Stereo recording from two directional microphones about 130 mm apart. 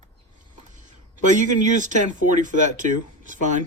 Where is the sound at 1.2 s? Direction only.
70° right (ahead or behind).